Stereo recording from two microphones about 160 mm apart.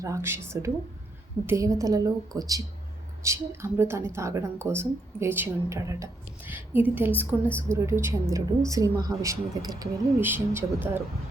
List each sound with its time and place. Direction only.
0.0 s a woman's voice: 15° right (ahead or behind)
10.2 s a woman's voice: 15° right (ahead or behind)